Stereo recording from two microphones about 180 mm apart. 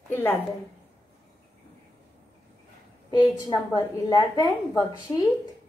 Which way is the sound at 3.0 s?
20° left (ahead or behind).